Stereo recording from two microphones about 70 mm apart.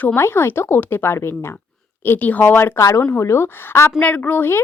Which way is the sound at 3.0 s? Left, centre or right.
Left.